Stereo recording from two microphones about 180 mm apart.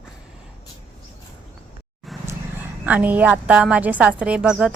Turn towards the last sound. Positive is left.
turn(degrees=-5)  # may be behind; listen again after turning